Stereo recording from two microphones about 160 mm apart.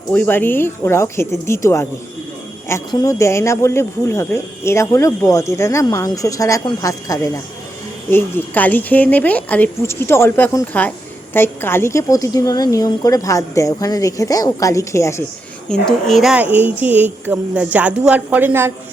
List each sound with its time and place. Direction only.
0.1 s speech: 10° left (ahead or behind)
8.1 s a woman's voice: 10° left (ahead or behind)
15.7 s a woman's voice: centre (ahead or behind); by 18.7 s 15° right (ahead or behind)